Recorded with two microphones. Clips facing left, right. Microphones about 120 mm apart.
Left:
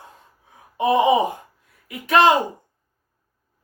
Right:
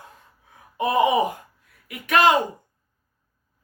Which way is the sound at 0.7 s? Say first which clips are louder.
Left 3 dB; 25° left (ahead or behind).